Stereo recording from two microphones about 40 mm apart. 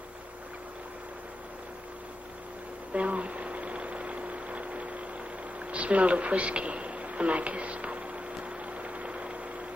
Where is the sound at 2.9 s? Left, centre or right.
Right.